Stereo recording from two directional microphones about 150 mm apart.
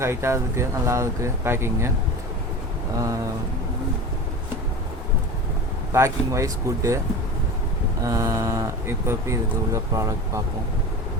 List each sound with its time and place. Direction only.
0.0 s speech: 15° right (ahead or behind)
5.9 s speech: 20° right (ahead or behind)
8.0 s speech: 20° right (ahead or behind)